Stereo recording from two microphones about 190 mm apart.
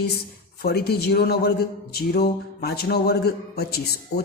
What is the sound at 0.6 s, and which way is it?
A man's voice, 55° left (ahead or behind).